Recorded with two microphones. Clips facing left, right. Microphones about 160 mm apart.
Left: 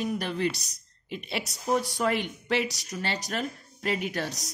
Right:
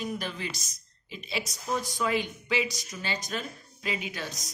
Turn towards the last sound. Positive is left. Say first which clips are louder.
# left 5 dB
turn(degrees=70)  # may be behind; listen again after turning